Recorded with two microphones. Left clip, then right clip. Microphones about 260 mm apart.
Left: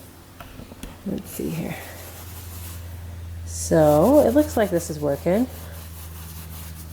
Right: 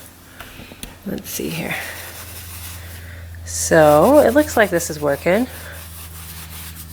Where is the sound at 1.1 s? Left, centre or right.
Centre.